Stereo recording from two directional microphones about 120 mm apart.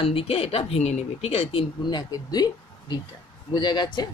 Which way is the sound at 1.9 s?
35° left (ahead or behind).